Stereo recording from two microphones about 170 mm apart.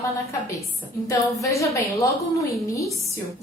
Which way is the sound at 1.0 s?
20° left (ahead or behind).